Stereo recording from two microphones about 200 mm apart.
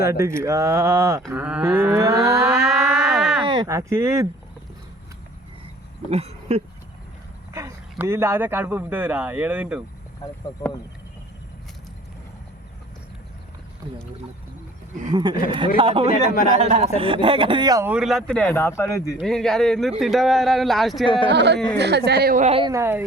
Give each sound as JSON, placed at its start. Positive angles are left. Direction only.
{"t": 0.0, "sound": "speech", "side_deg": -15}
{"t": 2.5, "sound": "a sound", "side_deg": -5}
{"t": 3.4, "sound": "speech", "side_deg": -25}
{"t": 6.1, "sound": "speech", "side_deg": -30}
{"t": 7.5, "sound": "speech", "side_deg": -15}
{"t": 15.1, "sound": "a man's voice", "side_deg": -25}
{"t": 19.2, "sound": "speech", "side_deg": 5}
{"t": 21.2, "sound": "speech", "side_deg": -60}
{"t": 22.4, "sound": "speech", "side_deg": -25}
{"t": 22.7, "sound": "speech", "side_deg": -10}